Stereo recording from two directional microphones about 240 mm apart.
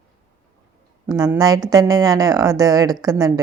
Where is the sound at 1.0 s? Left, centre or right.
Centre.